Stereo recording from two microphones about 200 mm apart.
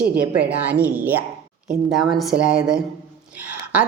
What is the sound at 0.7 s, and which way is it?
A woman's voice, 10° right (ahead or behind).